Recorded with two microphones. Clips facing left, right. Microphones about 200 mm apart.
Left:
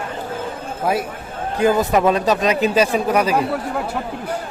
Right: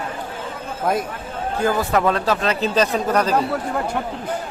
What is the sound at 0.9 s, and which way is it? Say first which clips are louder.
Speech: left 1 dB; 5° left (ahead or behind).